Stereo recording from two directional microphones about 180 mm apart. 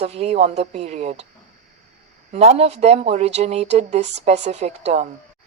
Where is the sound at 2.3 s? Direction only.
35° right (ahead or behind).